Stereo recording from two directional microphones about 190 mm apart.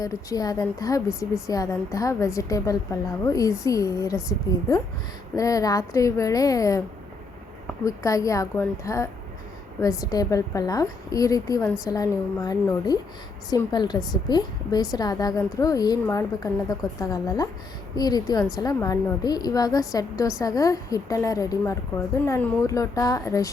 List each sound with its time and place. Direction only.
0.0 s a woman's voice: 20° left (ahead or behind)
5.4 s a woman's voice: 20° left (ahead or behind)
7.9 s a woman's voice: 15° left (ahead or behind)